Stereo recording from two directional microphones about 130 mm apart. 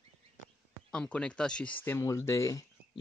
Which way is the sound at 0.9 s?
10° left (ahead or behind).